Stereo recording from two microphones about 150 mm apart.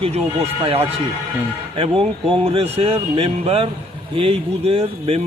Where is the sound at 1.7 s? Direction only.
40° right (ahead or behind).